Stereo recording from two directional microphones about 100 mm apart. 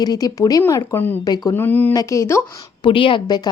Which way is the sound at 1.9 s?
35° left (ahead or behind).